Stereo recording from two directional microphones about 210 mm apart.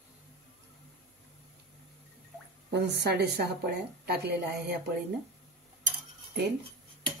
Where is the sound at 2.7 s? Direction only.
55° right (ahead or behind).